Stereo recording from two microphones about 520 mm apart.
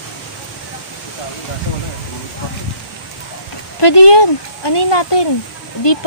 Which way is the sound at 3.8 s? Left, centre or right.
Left.